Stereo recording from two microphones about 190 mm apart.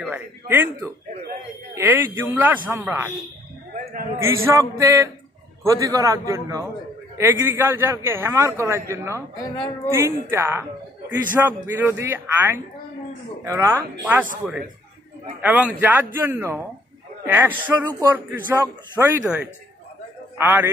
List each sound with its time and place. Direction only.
0.0 s a man's voice: 10° right (ahead or behind)
4.2 s a man's voice: 15° right (ahead or behind)
15.4 s a man's voice: 5° right (ahead or behind)